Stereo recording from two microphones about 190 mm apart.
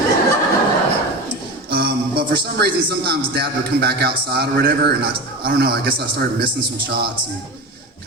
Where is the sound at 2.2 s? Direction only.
55° right (ahead or behind).